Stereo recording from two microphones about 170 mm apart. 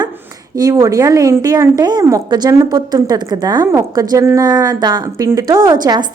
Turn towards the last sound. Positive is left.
turn(degrees=-25)  # may be behind; listen again after turning